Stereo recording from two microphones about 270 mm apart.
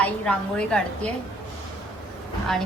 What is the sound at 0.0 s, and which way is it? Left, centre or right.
A woman's voice, centre.